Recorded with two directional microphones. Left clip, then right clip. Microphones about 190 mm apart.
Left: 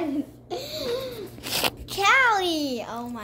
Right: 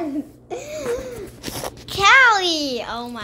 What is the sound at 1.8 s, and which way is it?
A child's voice, 10° left (ahead or behind).